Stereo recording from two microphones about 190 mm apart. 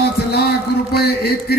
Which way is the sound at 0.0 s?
60° left (ahead or behind).